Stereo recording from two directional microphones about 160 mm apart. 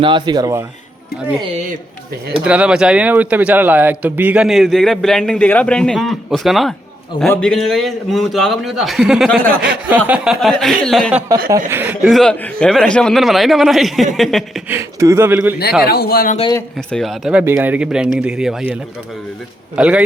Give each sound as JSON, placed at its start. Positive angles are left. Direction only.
{"t": 0.0, "sound": "speech", "side_deg": -30}
{"t": 2.4, "sound": "a man's voice", "side_deg": -5}
{"t": 11.4, "sound": "speech", "side_deg": -15}
{"t": 12.0, "sound": "a man's voice", "side_deg": 5}
{"t": 14.7, "sound": "speech", "side_deg": -15}
{"t": 15.8, "sound": "speech", "side_deg": 75}
{"t": 16.7, "sound": "a man's voice", "side_deg": 0}
{"t": 17.4, "sound": "speech", "side_deg": -15}